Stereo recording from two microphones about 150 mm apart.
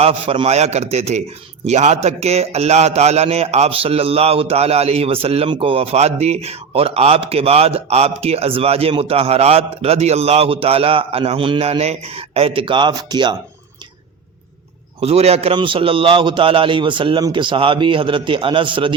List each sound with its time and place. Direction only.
0.0 s a man's voice: 40° right (ahead or behind)
15.0 s a man's voice: 45° right (ahead or behind)